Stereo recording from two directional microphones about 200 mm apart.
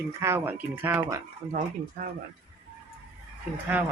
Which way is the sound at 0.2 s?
10° right (ahead or behind).